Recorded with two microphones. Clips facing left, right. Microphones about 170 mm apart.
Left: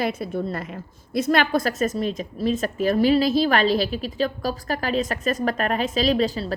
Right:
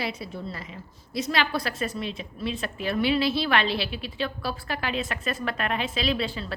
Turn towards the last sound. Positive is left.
turn(degrees=40)  # may be behind; listen again after turning